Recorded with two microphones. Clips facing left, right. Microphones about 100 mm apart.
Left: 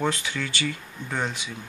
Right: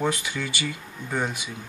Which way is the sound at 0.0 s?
10° right (ahead or behind).